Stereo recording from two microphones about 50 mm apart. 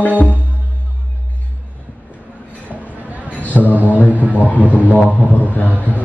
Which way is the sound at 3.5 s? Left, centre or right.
Right.